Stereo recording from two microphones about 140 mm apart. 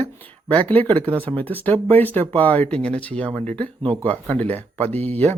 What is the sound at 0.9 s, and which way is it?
Speech, 10° left (ahead or behind).